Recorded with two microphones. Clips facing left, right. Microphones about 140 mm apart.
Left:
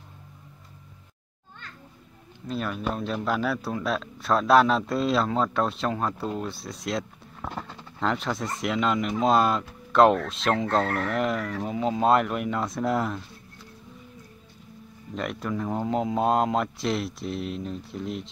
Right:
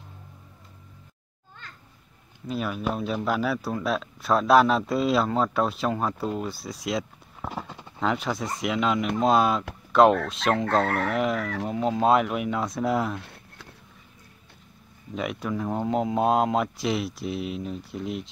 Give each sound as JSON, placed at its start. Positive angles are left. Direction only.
{"t": 2.4, "sound": "speech", "side_deg": -5}
{"t": 13.2, "sound": "a sound", "side_deg": -65}
{"t": 15.1, "sound": "speech", "side_deg": 0}